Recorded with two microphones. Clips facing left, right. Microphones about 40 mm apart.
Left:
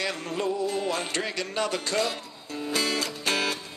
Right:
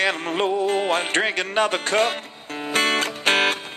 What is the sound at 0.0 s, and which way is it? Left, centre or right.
Music, right.